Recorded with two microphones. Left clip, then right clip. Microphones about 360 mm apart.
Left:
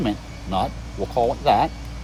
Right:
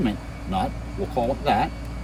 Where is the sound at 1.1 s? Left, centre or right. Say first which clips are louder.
Left 4 dB; centre.